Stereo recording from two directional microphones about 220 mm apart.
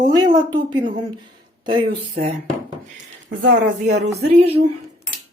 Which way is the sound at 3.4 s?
50° right (ahead or behind).